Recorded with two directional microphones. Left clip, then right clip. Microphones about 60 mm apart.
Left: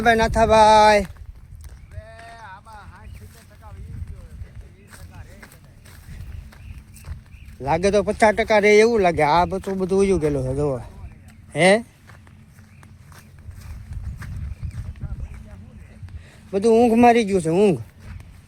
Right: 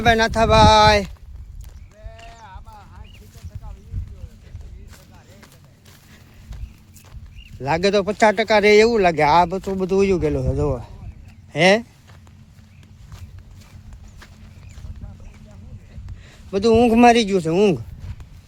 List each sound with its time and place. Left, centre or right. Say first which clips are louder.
0.2 s speech: even; left
2.5 s clip-clop: left 2 dB; right
7.6 s speech: even; centre
8.2 s speech: right 1 dB; right
9.6 s speech: right 1 dB; right
9.8 s speech: right 1 dB; centre
16.5 s a man's voice: right 1 dB; centre
16.8 s speech: right 3 dB; right
17.2 s speech: right 1 dB; centre